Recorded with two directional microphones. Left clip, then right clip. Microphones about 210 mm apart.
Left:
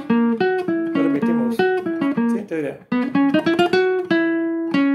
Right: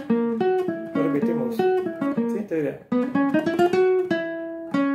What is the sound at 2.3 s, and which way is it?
Music, 10° left (ahead or behind).